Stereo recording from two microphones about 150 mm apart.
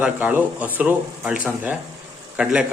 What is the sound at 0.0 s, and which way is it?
A man's voice, 10° right (ahead or behind).